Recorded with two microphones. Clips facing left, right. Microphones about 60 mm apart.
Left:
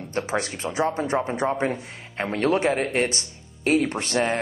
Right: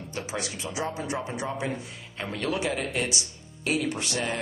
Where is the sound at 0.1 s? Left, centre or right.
Left.